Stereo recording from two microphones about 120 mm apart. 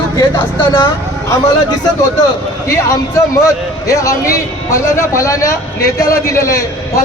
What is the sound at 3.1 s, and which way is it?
A man's voice, 25° left (ahead or behind).